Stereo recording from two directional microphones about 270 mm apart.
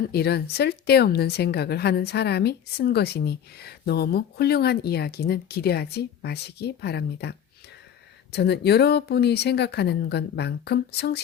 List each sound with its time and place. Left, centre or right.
0.0 s speech: left